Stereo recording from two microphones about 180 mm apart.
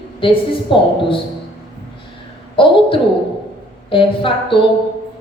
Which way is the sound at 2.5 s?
30° left (ahead or behind).